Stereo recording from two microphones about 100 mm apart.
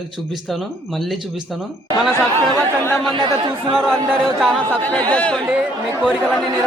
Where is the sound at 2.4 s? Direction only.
40° right (ahead or behind).